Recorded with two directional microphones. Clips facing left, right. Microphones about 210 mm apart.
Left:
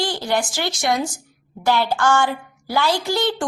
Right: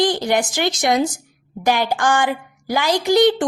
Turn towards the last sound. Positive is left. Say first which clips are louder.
# right 7 dB
turn(degrees=-20)  # may be behind; listen again after turning